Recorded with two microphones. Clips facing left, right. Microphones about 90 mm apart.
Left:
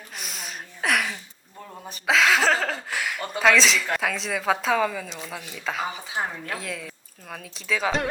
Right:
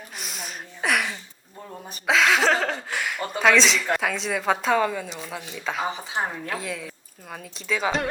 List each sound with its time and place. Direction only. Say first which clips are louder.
0.2 s a sound: even; centre (ahead or behind)
2.0 s speech: even; centre (ahead or behind)
6.2 s speech: right 1 dB; 20° right (ahead or behind)
6.5 s speech: right 2 dB; centre (ahead or behind)